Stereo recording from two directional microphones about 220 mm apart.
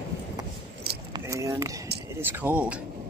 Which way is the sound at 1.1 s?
15° right (ahead or behind).